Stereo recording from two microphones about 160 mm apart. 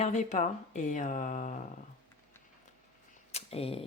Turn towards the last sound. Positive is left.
turn(degrees=35)  # may be behind; listen again after turning